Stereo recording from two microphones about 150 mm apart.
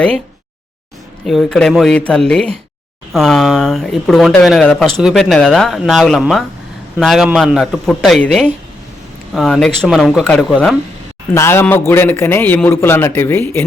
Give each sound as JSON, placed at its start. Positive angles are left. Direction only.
{"t": 1.3, "sound": "speech", "side_deg": 5}
{"t": 11.3, "sound": "a man's voice", "side_deg": 15}